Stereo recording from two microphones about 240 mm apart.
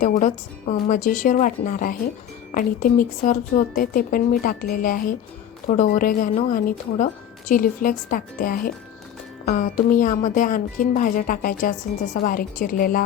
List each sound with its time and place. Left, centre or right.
0.0 s speech: left